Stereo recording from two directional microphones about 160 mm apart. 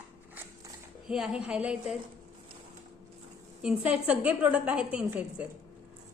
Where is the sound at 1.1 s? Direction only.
5° right (ahead or behind).